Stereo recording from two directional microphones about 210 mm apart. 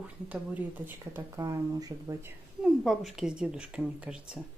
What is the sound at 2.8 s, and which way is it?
Speech, centre (ahead or behind).